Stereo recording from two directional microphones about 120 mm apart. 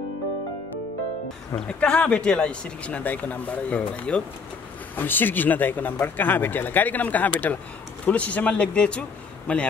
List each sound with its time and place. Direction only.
1.5 s speech: 10° left (ahead or behind)